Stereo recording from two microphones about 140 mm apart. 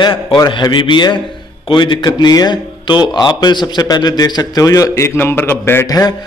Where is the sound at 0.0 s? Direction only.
40° left (ahead or behind).